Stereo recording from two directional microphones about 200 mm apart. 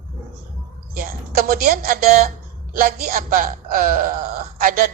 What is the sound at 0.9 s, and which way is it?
Speech, 45° right (ahead or behind).